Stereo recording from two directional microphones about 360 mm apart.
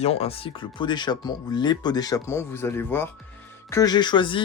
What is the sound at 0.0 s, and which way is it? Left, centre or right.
Speech, centre.